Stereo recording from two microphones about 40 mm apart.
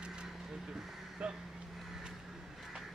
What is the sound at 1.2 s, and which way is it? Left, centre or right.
Vehicle, right.